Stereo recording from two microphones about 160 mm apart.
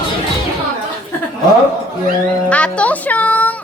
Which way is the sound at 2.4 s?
5° left (ahead or behind).